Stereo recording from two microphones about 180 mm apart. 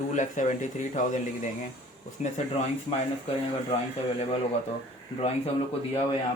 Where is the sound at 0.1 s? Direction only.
45° left (ahead or behind).